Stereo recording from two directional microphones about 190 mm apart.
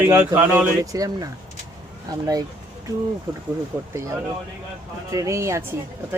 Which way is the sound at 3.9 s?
15° right (ahead or behind).